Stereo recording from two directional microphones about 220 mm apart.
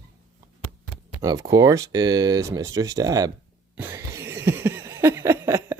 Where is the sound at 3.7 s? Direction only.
10° right (ahead or behind).